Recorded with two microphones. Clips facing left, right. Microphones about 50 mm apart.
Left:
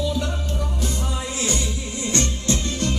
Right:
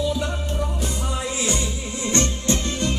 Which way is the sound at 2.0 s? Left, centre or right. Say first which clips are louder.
Right 2 dB; right.